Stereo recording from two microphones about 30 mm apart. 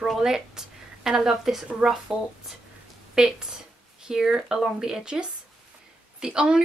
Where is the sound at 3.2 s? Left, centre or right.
Centre.